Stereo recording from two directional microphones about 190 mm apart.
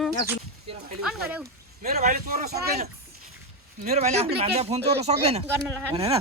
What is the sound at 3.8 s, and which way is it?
Speech, 35° right (ahead or behind).